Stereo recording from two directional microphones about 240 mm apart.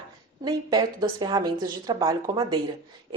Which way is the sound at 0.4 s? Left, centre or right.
Centre.